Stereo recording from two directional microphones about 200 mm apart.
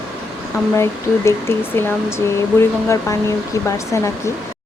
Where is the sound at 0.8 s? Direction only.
15° left (ahead or behind).